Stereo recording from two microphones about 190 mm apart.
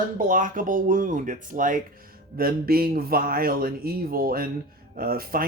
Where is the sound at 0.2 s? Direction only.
45° right (ahead or behind).